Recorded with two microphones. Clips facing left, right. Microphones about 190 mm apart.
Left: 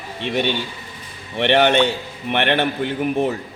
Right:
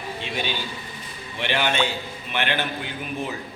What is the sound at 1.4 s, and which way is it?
A man's voice, 65° left (ahead or behind).